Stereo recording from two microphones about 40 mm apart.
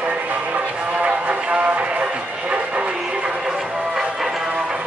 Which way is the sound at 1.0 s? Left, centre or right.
Right.